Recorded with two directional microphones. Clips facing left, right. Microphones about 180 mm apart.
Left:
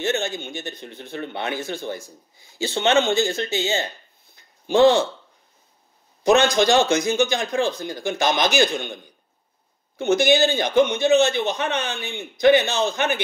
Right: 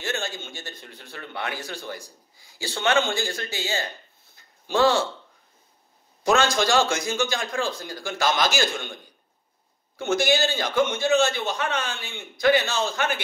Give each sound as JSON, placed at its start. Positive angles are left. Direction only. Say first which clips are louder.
{"t": 0.0, "sound": "speech", "louder": "left 6 dB", "side_deg": 20}
{"t": 6.2, "sound": "speech", "louder": "left 5 dB", "side_deg": 20}